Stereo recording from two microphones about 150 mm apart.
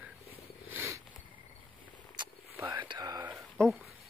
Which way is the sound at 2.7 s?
30° right (ahead or behind).